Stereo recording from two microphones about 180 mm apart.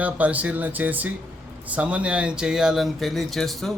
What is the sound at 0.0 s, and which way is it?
Speech, 10° right (ahead or behind).